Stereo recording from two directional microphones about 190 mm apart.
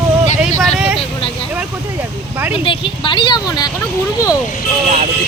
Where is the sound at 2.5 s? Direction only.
30° left (ahead or behind).